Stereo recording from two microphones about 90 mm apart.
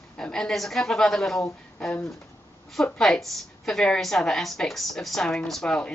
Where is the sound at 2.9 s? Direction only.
5° left (ahead or behind).